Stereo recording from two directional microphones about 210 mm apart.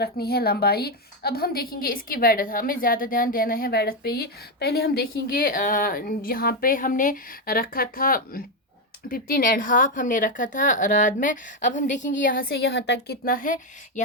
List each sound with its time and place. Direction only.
0.0 s a woman's voice: 50° left (ahead or behind)